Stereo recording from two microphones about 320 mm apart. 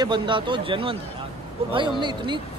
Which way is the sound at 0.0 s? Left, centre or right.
Centre.